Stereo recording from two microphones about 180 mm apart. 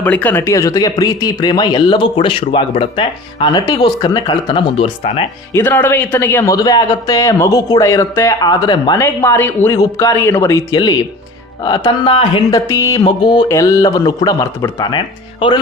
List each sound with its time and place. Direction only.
0.0 s speech: 10° left (ahead or behind)
4.4 s speech: 35° left (ahead or behind)
5.5 s speech: 10° left (ahead or behind)